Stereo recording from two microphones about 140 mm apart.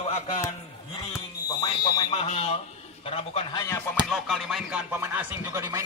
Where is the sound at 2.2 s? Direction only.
45° left (ahead or behind).